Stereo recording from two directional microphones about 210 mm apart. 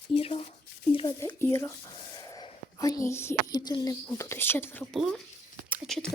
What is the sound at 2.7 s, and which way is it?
Speech, 15° left (ahead or behind).